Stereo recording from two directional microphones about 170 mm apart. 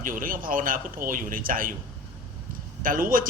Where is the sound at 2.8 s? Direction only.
55° right (ahead or behind).